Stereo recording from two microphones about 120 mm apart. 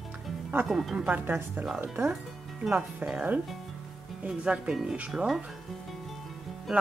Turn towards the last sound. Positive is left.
turn(degrees=-5)  # may be behind; listen again after turning